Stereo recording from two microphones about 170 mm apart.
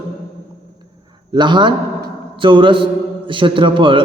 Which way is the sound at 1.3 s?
25° right (ahead or behind).